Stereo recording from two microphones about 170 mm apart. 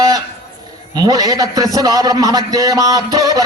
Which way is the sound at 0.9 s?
20° right (ahead or behind).